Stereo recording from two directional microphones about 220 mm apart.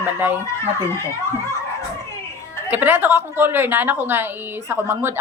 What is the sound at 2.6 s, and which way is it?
Speech, 10° right (ahead or behind).